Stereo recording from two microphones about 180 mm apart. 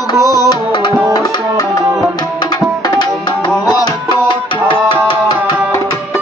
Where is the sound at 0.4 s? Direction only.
25° left (ahead or behind).